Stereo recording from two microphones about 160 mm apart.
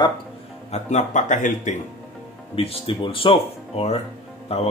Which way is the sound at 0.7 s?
50° left (ahead or behind).